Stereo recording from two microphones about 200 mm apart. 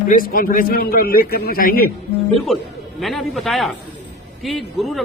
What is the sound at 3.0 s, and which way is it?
Speech, centre (ahead or behind).